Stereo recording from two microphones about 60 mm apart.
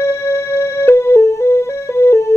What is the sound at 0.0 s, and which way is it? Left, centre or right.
Music, left.